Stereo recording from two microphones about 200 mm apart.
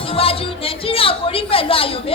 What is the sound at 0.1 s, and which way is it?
Speech, 30° left (ahead or behind).